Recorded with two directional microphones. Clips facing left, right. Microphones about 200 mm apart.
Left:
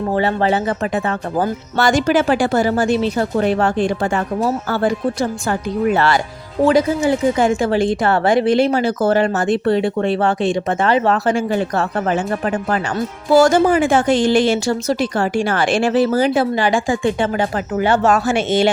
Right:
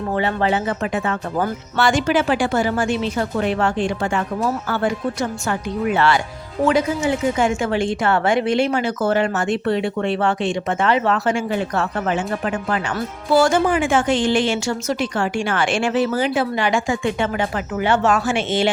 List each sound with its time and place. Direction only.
0.1 s a woman's voice: 35° left (ahead or behind)